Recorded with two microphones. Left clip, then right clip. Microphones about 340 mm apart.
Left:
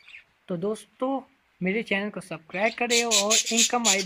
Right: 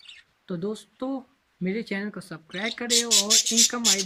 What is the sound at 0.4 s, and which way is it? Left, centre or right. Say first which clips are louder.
Speech: left 3 dB; centre.